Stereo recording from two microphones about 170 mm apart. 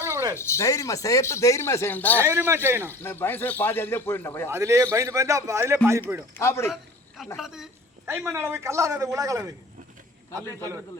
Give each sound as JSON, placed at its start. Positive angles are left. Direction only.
{"t": 0.0, "sound": "a sound", "side_deg": -15}
{"t": 0.3, "sound": "speech", "side_deg": 15}
{"t": 2.2, "sound": "a man's voice", "side_deg": -15}
{"t": 3.0, "sound": "speech", "side_deg": 10}
{"t": 4.4, "sound": "a man's voice", "side_deg": -15}
{"t": 6.3, "sound": "speech", "side_deg": 15}
{"t": 7.3, "sound": "a woman's voice", "side_deg": -5}
{"t": 8.3, "sound": "a woman's voice", "side_deg": -15}